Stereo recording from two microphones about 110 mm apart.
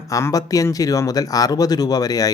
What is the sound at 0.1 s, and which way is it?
Speech, 30° left (ahead or behind).